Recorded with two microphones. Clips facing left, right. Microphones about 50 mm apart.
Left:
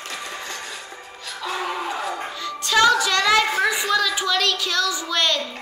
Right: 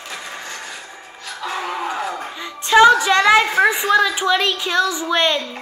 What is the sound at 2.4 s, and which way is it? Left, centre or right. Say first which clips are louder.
Music: right 6 dB; right.